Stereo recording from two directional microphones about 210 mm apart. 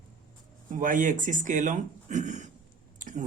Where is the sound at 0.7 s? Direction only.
40° right (ahead or behind).